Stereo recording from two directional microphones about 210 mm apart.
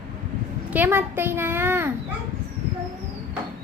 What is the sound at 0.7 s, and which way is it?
A child's voice, 10° right (ahead or behind).